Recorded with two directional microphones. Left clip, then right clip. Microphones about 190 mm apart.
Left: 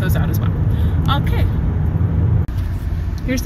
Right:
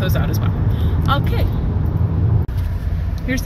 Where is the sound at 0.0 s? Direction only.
5° left (ahead or behind).